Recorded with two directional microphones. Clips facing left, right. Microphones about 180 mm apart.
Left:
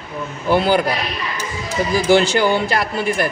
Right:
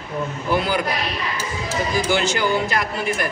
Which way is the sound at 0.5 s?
30° left (ahead or behind).